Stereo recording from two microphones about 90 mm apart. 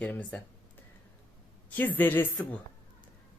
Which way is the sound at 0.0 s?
15° left (ahead or behind).